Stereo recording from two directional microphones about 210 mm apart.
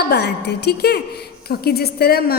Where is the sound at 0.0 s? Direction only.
50° left (ahead or behind).